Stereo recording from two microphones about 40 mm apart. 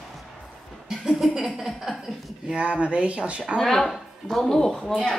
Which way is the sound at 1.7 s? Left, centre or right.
Centre.